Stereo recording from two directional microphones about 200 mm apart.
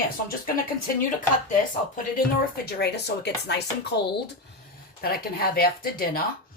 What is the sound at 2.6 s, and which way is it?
Speech, 55° left (ahead or behind).